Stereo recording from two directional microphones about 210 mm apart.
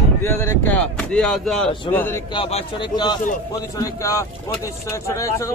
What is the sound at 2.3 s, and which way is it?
A man's voice, 25° left (ahead or behind).